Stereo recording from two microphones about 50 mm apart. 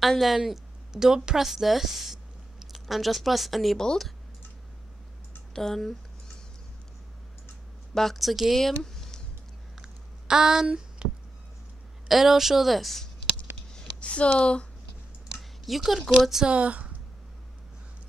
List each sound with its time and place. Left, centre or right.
0.0 s speech: centre
3.7 s speech: centre
5.5 s speech: centre
7.9 s speech: centre
9.8 s a sound: centre
12.1 s speech: centre
13.7 s a sound: left
15.6 s speech: centre
16.4 s speech: right